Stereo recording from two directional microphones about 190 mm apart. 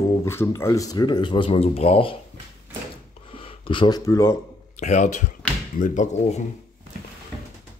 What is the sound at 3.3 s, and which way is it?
Speech, 30° left (ahead or behind).